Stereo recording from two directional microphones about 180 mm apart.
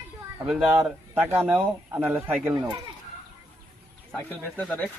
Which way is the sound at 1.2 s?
10° right (ahead or behind).